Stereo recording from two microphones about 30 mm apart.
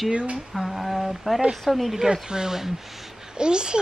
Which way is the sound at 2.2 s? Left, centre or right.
Right.